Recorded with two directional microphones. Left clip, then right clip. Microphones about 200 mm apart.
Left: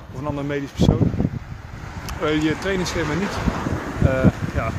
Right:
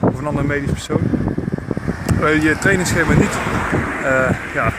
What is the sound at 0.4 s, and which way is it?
Speech, 15° left (ahead or behind).